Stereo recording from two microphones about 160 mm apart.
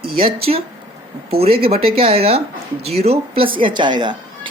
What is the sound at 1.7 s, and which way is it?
Speech, 35° right (ahead or behind).